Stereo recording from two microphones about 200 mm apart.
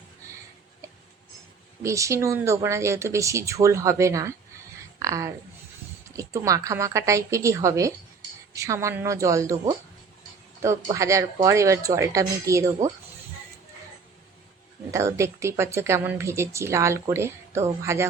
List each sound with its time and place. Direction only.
1.8 s speech: 15° right (ahead or behind)
4.9 s a sound: 15° right (ahead or behind)
6.1 s speech: 15° right (ahead or behind)
10.9 s speech: 15° right (ahead or behind)
14.9 s speech: 15° right (ahead or behind)